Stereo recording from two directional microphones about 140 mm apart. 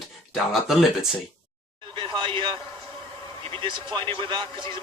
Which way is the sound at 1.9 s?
35° right (ahead or behind).